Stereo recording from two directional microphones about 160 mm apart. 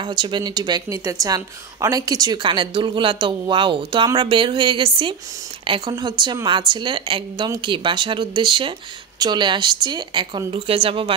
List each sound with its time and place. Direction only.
0.0 s a woman's voice: 30° right (ahead or behind)